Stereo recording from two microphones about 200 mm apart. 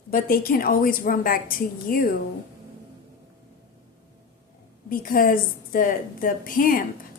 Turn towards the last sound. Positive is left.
turn(degrees=45)  # may be behind; listen again after turning